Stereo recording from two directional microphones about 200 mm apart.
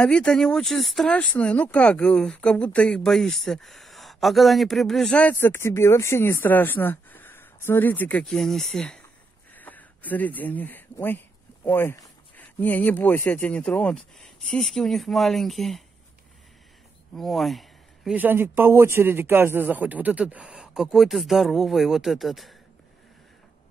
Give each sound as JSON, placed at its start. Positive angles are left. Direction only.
{"t": 0.0, "sound": "speech", "side_deg": 5}
{"t": 17.1, "sound": "speech", "side_deg": 0}